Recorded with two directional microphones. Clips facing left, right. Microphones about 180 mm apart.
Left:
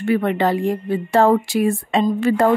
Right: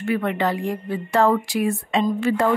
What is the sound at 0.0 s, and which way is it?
A woman's voice, 30° left (ahead or behind).